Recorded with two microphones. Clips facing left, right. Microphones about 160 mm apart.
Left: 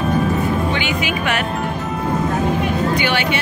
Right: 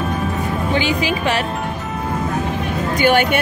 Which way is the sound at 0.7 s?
35° right (ahead or behind).